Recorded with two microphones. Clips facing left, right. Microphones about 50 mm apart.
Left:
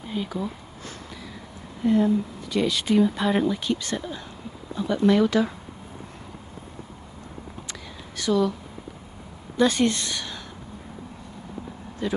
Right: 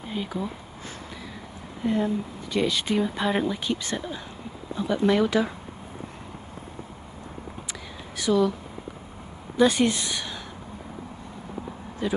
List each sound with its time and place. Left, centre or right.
0.1 s speech: centre
1.8 s speech: right
8.2 s speech: centre
9.6 s speech: centre
12.0 s speech: centre